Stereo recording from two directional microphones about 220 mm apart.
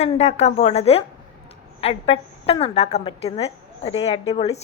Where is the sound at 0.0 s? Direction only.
30° left (ahead or behind).